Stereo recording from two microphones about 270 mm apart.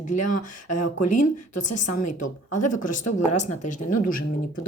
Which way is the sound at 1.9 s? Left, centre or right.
Left.